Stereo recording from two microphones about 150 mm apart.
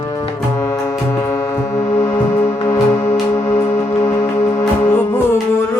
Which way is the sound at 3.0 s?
55° left (ahead or behind).